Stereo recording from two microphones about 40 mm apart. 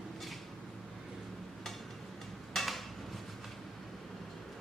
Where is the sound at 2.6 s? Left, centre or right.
Centre.